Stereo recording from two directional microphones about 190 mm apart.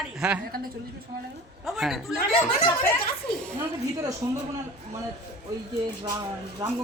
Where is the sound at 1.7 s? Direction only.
Centre (ahead or behind).